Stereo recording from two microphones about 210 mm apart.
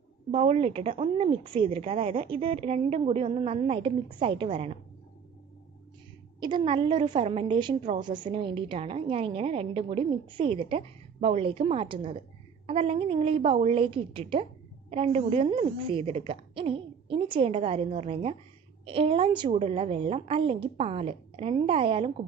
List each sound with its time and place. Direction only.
0.3 s a woman's voice: 30° right (ahead or behind)
6.4 s a woman's voice: 25° right (ahead or behind)